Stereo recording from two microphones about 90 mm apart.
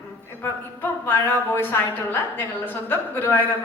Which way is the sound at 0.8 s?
25° left (ahead or behind).